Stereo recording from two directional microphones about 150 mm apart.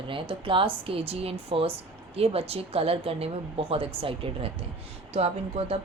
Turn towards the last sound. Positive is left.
turn(degrees=-45)  # may be behind; listen again after turning